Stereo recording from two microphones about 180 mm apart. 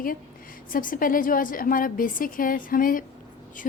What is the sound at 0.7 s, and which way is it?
Speech, 50° left (ahead or behind).